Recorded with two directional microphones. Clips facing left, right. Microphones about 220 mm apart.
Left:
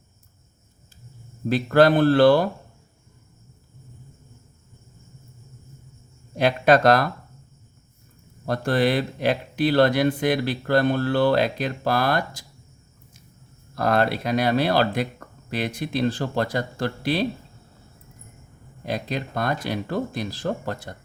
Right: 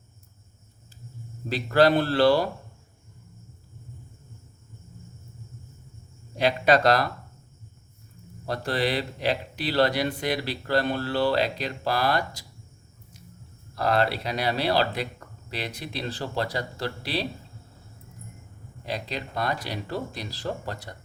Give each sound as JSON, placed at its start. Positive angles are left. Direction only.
{"t": 1.5, "sound": "speech", "side_deg": 50}
{"t": 6.3, "sound": "speech", "side_deg": 50}
{"t": 8.4, "sound": "speech", "side_deg": 50}
{"t": 13.7, "sound": "speech", "side_deg": 50}
{"t": 18.9, "sound": "speech", "side_deg": 50}